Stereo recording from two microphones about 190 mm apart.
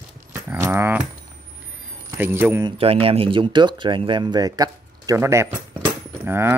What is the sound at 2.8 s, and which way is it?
Speech, 30° right (ahead or behind).